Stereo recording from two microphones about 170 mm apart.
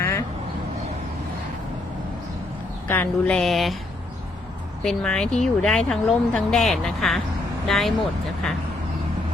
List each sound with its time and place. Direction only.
0.0 s quack: 15° left (ahead or behind)
2.8 s speech: 10° left (ahead or behind)
4.8 s speech: 5° left (ahead or behind)